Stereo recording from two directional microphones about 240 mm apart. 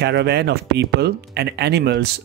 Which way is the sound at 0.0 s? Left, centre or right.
Right.